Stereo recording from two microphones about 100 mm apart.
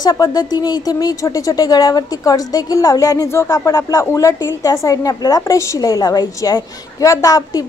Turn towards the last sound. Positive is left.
turn(degrees=35)  # may be behind; listen again after turning